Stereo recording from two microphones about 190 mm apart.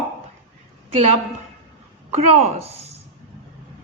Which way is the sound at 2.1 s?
35° right (ahead or behind).